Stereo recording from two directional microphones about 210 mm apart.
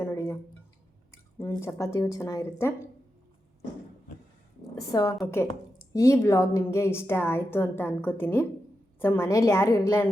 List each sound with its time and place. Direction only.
0.0 s a sound: 10° left (ahead or behind)
1.1 s speech: 10° left (ahead or behind)
4.9 s a woman's voice: 15° left (ahead or behind)